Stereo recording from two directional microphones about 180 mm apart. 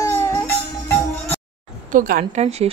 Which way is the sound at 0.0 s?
15° left (ahead or behind).